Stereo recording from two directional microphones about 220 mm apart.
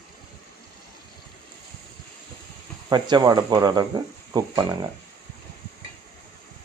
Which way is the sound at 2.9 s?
20° right (ahead or behind).